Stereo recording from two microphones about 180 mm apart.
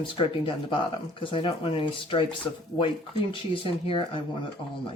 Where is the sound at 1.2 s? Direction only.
30° left (ahead or behind).